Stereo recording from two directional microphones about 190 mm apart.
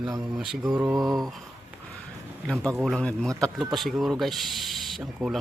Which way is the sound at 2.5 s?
5° left (ahead or behind).